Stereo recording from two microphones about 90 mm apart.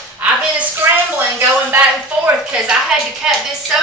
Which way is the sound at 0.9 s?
25° right (ahead or behind).